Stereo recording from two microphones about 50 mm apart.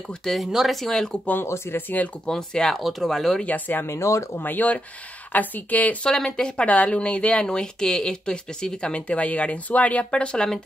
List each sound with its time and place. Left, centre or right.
0.2 s speech: centre
1.4 s speech: left
2.2 s speech: centre
2.8 s speech: centre
3.4 s speech: left
3.8 s speech: left
4.4 s speech: left
6.0 s speech: centre